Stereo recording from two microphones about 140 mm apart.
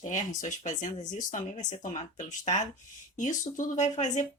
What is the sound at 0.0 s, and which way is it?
Speech, 60° left (ahead or behind).